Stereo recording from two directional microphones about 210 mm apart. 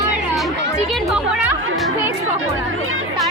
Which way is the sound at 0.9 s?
Centre (ahead or behind).